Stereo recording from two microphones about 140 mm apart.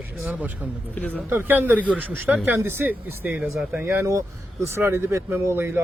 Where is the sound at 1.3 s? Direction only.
15° right (ahead or behind).